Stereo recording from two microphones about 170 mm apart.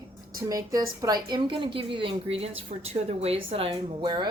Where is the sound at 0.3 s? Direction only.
20° right (ahead or behind).